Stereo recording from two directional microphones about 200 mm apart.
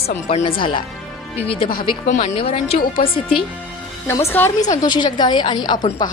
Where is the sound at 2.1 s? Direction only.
35° left (ahead or behind).